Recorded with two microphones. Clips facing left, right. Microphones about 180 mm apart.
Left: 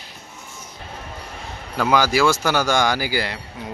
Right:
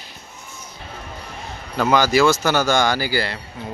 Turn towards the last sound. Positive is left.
turn(degrees=15)  # may be behind; listen again after turning